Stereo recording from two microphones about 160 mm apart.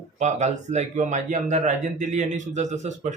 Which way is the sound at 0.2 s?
45° right (ahead or behind).